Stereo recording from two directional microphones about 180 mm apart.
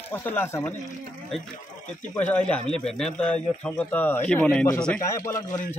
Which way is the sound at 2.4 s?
5° left (ahead or behind).